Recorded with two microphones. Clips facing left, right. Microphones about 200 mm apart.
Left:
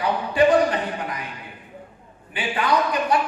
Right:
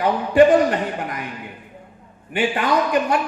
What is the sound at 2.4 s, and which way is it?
Speech, 50° right (ahead or behind).